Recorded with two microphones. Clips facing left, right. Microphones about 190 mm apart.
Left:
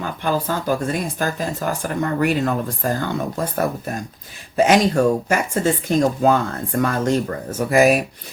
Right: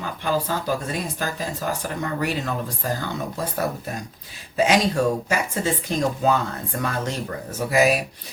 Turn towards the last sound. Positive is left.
turn(degrees=50)  # may be behind; listen again after turning